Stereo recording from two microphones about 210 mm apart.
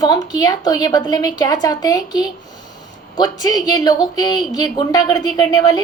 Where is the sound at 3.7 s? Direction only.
20° left (ahead or behind).